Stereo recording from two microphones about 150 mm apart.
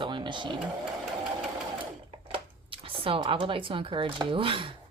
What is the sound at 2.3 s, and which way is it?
Speech, 35° right (ahead or behind).